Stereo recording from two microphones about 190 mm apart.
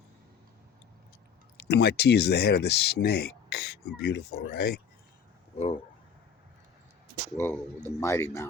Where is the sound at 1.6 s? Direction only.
60° left (ahead or behind).